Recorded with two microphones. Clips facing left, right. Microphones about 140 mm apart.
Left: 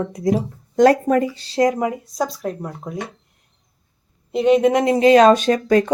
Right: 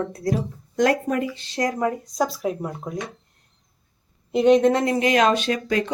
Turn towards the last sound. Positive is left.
turn(degrees=45)  # may be behind; listen again after turning